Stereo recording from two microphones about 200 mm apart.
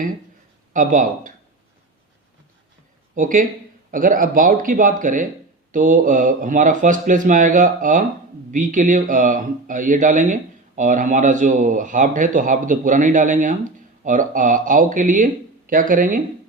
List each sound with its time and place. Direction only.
0.7 s speech: 40° right (ahead or behind)
3.2 s speech: 40° right (ahead or behind)